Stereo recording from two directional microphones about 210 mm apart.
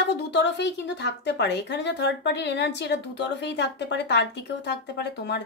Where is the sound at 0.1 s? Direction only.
55° left (ahead or behind).